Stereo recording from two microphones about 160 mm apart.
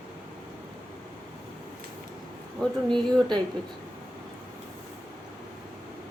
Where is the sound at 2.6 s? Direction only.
5° left (ahead or behind).